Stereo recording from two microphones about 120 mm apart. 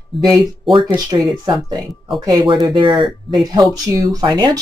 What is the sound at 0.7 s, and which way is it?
Speech, 40° right (ahead or behind).